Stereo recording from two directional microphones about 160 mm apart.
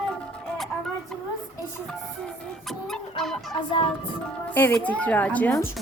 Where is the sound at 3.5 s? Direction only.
30° left (ahead or behind).